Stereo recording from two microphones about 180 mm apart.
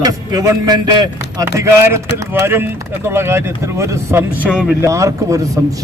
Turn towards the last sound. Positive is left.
turn(degrees=-20)  # may be behind; listen again after turning